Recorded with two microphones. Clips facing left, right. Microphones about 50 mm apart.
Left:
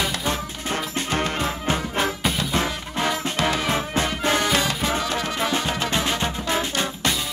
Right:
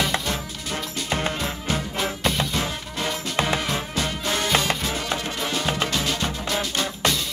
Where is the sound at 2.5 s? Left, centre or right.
Left.